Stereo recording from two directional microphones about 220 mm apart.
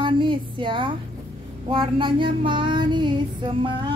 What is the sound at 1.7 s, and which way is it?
Female singing, 25° right (ahead or behind).